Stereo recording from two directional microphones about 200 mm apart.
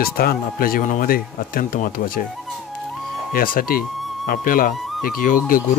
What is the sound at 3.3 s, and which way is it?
Speech, 45° left (ahead or behind).